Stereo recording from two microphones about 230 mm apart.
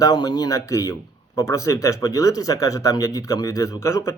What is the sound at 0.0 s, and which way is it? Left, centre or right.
Speech, centre.